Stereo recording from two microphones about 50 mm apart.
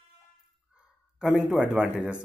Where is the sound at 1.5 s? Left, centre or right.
Right.